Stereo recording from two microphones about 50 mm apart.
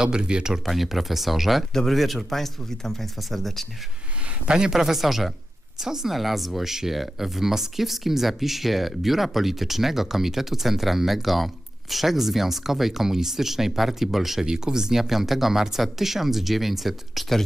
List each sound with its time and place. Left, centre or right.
0.0 s speech: centre
0.7 s speech: centre
4.5 s speech: centre